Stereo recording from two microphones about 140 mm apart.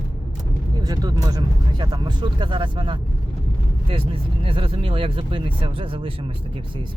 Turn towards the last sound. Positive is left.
turn(degrees=-40)  # may be behind; listen again after turning